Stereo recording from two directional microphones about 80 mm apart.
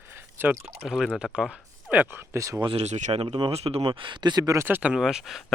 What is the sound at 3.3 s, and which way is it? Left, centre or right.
Speech, right.